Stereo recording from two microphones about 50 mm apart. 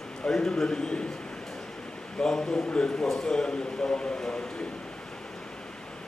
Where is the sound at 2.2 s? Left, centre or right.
Centre.